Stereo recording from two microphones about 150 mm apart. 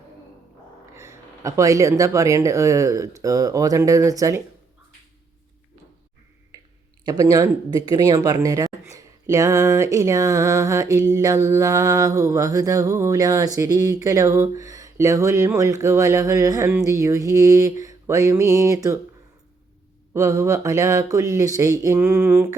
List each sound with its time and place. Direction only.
0.9 s speech: 20° right (ahead or behind)
6.5 s a sound: 25° right (ahead or behind)
7.0 s speech: 25° right (ahead or behind)
20.1 s speech: 20° right (ahead or behind)